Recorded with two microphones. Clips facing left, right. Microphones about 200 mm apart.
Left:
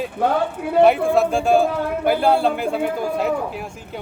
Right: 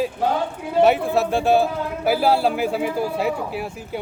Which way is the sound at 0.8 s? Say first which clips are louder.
Left 2 dB; 60° left (ahead or behind).